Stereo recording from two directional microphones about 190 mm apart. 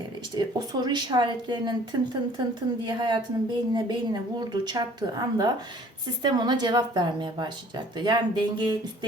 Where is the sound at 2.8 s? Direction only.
25° right (ahead or behind).